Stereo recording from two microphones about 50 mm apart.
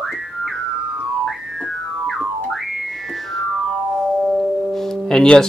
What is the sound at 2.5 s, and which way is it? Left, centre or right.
Music, centre.